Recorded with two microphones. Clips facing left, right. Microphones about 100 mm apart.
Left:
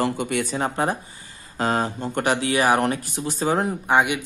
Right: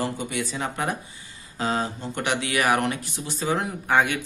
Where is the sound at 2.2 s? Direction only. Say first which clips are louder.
Left 3 dB; 35° left (ahead or behind).